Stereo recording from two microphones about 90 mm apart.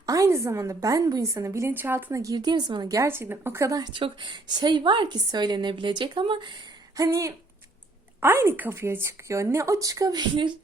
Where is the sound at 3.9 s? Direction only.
65° right (ahead or behind).